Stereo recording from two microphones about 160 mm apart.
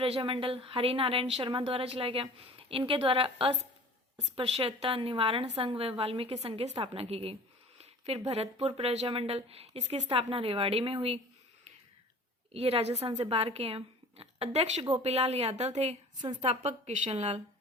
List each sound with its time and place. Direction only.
0.0 s speech: 35° right (ahead or behind)
12.5 s a woman's voice: 40° right (ahead or behind)